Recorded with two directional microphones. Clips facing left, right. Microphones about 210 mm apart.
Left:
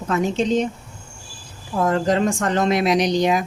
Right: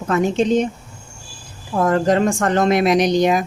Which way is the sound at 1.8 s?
55° right (ahead or behind).